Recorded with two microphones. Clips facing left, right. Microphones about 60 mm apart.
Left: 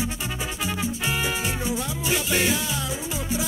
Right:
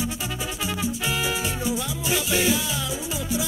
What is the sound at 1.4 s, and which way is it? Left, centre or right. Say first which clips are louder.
Music: even; left.